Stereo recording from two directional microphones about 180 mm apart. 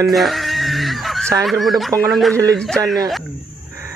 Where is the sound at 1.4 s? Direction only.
Centre (ahead or behind).